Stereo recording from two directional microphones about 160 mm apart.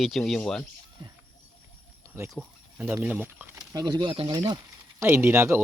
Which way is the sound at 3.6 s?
25° right (ahead or behind).